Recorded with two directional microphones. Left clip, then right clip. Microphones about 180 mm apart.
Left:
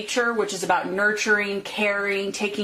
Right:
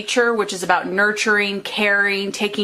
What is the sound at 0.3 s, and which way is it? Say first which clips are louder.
Speech: right 4 dB; 40° right (ahead or behind).